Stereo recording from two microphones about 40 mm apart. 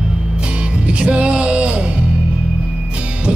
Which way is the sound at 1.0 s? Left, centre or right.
Right.